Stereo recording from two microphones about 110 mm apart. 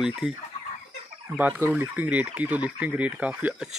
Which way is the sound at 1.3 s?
15° right (ahead or behind).